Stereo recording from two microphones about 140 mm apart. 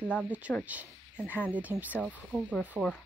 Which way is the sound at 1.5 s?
10° right (ahead or behind).